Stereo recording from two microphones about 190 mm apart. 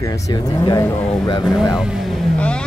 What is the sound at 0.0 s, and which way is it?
Speech, 15° left (ahead or behind).